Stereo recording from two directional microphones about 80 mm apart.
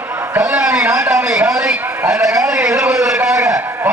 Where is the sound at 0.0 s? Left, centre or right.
Right.